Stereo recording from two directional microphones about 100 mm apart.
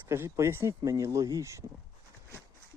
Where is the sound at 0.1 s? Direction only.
30° right (ahead or behind).